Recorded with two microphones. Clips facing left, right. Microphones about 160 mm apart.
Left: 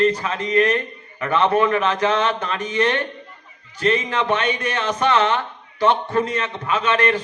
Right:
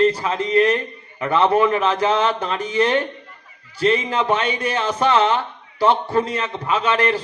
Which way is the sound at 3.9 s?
30° right (ahead or behind).